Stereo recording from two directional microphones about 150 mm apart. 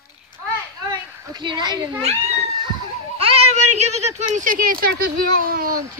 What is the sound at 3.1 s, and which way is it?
Speech, 40° right (ahead or behind).